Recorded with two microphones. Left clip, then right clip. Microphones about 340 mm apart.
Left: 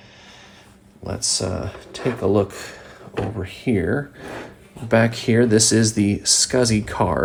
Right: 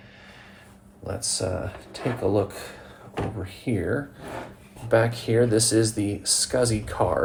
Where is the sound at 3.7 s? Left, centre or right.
Left.